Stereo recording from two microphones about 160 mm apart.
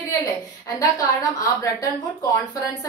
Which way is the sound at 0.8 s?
20° left (ahead or behind).